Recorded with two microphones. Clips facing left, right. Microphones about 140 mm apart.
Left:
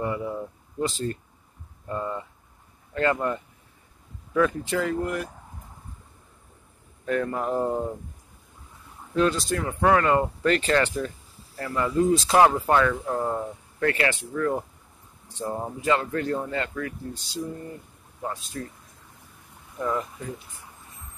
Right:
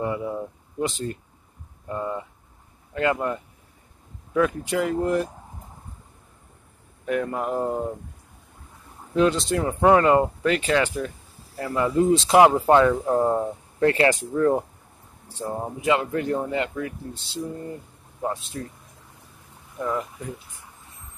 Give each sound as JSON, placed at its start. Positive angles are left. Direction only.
{"t": 0.0, "sound": "speech", "side_deg": -15}
{"t": 5.0, "sound": "speech", "side_deg": -30}
{"t": 7.1, "sound": "speech", "side_deg": -10}
{"t": 9.1, "sound": "speech", "side_deg": -20}
{"t": 10.4, "sound": "speech", "side_deg": -5}
{"t": 15.2, "sound": "speech", "side_deg": -10}
{"t": 19.8, "sound": "speech", "side_deg": -10}